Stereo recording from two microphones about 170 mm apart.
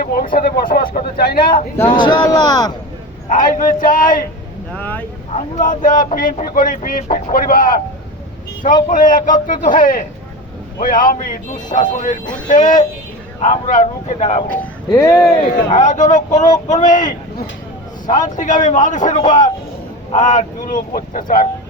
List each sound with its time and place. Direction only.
0.0 s speech: 55° left (ahead or behind)
2.0 s speech: 25° left (ahead or behind)
3.2 s speech: 50° left (ahead or behind)
4.7 s speech: 10° left (ahead or behind)
5.3 s speech: 50° left (ahead or behind)
14.6 s speech: 10° left (ahead or behind)
15.7 s speech: 45° left (ahead or behind)